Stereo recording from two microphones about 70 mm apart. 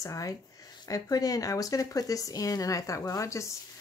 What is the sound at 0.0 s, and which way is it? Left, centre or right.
Speech, left.